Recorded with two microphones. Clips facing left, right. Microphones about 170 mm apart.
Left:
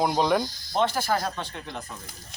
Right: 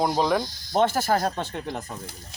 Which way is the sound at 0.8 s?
45° right (ahead or behind).